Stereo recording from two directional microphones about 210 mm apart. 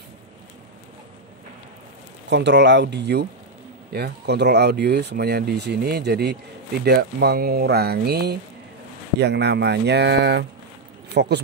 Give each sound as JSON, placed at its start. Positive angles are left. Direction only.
{"t": 2.2, "sound": "speech", "side_deg": -55}